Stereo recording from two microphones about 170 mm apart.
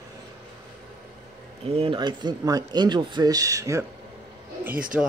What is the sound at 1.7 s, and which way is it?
Speech, 35° right (ahead or behind).